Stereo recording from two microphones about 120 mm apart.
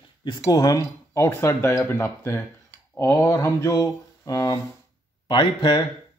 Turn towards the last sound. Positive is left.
turn(degrees=40)  # may be behind; listen again after turning